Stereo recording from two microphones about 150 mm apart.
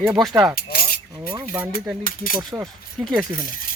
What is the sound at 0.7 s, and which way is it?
Cutlery, 75° left (ahead or behind).